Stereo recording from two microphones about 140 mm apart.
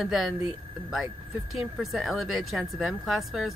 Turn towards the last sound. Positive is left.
turn(degrees=0)  # may be behind; listen again after turning